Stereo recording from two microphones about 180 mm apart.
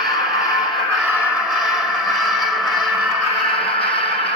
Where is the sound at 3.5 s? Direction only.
30° left (ahead or behind).